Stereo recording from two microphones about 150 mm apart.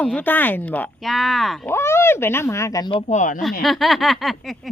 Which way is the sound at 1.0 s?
Centre (ahead or behind).